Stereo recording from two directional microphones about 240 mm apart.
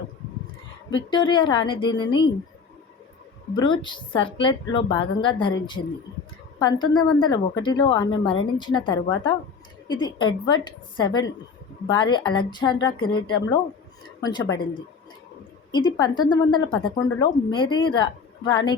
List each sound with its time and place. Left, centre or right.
0.9 s speech: centre
3.5 s a woman's voice: centre
15.7 s a woman's voice: centre